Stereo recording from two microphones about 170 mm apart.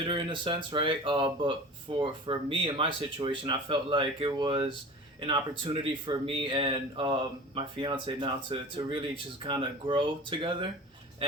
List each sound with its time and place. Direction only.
0.0 s speech: 30° right (ahead or behind)